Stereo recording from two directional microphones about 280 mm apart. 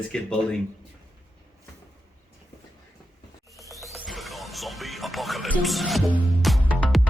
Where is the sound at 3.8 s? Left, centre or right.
Centre.